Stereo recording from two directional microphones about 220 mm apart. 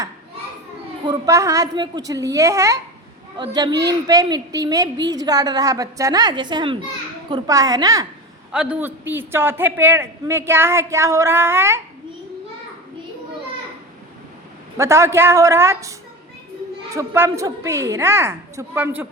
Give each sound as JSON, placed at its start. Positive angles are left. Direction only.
{"t": 1.0, "sound": "a man's voice", "side_deg": -15}
{"t": 8.5, "sound": "a man's voice", "side_deg": -5}
{"t": 14.8, "sound": "a man's voice", "side_deg": -10}